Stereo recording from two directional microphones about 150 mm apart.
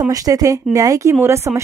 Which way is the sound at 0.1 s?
25° right (ahead or behind).